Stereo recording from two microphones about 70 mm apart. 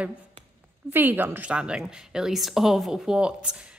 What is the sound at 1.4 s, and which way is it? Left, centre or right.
Speech, centre.